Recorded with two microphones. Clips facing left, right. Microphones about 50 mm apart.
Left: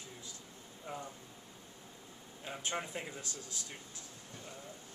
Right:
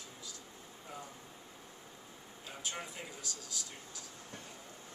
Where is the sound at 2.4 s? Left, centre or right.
Left.